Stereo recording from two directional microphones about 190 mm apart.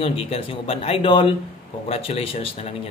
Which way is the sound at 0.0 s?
30° left (ahead or behind).